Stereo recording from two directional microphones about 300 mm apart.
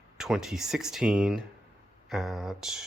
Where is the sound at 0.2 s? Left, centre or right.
Centre.